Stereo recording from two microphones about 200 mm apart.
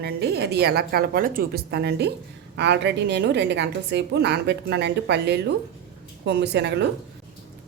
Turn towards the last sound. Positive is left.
turn(degrees=-55)  # may be behind; listen again after turning